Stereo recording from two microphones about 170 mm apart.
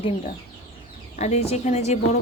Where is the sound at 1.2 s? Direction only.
40° left (ahead or behind).